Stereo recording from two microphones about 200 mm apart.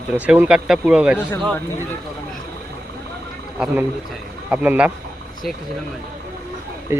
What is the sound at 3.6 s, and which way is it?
A man's voice, 5° right (ahead or behind).